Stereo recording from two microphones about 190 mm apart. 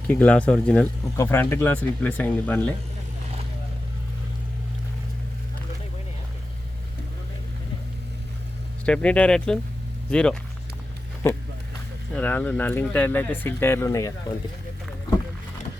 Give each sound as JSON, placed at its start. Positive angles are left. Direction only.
{"t": 0.1, "sound": "speech", "side_deg": 5}
{"t": 8.9, "sound": "speech", "side_deg": 5}
{"t": 11.2, "sound": "speech", "side_deg": 15}